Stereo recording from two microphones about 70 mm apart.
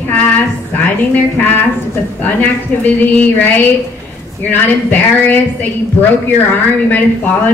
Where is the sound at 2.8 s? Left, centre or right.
Left.